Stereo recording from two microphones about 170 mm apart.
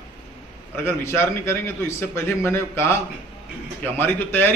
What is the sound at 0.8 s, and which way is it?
A man's voice, 15° left (ahead or behind).